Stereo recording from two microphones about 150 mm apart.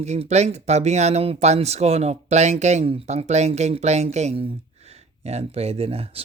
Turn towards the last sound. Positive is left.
turn(degrees=-40)  # may be behind; listen again after turning